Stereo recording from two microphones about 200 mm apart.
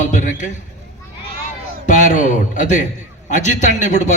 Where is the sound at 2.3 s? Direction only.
40° left (ahead or behind).